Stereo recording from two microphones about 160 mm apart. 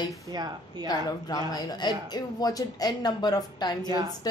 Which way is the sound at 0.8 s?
25° left (ahead or behind).